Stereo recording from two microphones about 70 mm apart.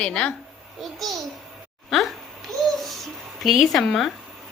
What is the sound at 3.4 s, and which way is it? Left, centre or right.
Speech, centre.